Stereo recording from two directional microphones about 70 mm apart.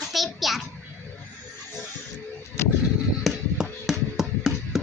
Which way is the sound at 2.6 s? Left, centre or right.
Left.